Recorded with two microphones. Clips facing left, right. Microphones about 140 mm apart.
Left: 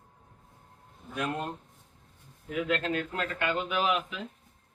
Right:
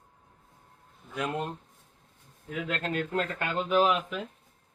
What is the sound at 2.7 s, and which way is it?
Speech, 45° right (ahead or behind).